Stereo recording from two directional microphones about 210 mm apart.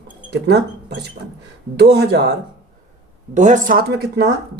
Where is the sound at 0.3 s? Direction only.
50° right (ahead or behind).